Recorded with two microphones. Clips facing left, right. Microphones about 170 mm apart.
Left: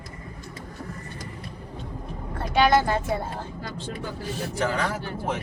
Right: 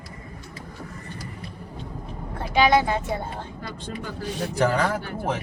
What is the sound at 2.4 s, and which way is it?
Speech, centre (ahead or behind).